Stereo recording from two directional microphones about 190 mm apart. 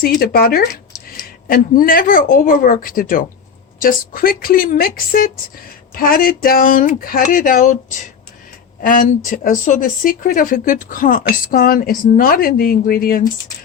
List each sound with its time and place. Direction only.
0.2 s speech: 50° left (ahead or behind)